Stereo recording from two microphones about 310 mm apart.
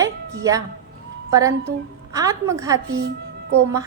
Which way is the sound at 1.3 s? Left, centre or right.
Centre.